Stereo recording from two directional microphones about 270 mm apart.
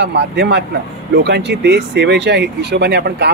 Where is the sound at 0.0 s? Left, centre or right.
Right.